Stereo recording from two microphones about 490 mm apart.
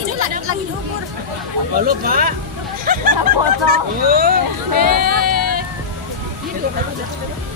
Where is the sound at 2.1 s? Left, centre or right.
Centre.